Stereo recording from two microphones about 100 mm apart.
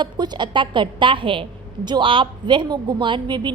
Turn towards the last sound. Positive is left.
turn(degrees=-50)  # may be behind; listen again after turning